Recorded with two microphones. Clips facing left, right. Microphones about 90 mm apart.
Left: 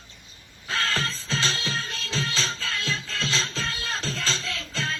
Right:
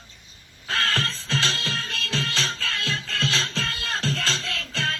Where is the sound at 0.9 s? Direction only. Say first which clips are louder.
Right 2 dB; 20° left (ahead or behind).